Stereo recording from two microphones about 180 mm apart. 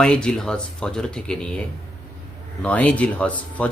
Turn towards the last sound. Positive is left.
turn(degrees=5)  # may be behind; listen again after turning